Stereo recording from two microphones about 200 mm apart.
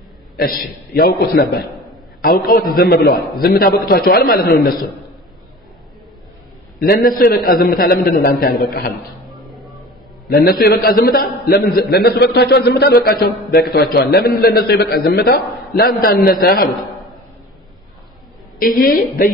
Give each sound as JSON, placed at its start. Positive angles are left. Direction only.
{"t": 0.9, "sound": "a man's voice", "side_deg": 45}
{"t": 6.8, "sound": "a man's voice", "side_deg": 45}
{"t": 10.3, "sound": "a man's voice", "side_deg": 50}
{"t": 18.6, "sound": "a man's voice", "side_deg": 45}